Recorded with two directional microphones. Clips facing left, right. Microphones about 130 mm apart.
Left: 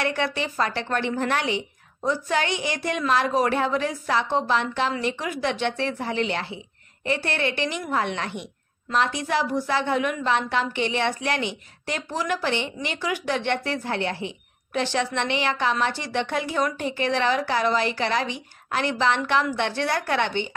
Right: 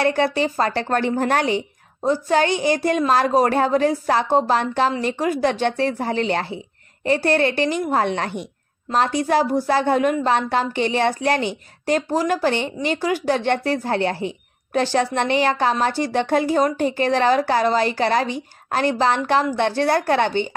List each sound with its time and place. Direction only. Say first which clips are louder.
0.0 s speech: right 7 dB; 35° right (ahead or behind)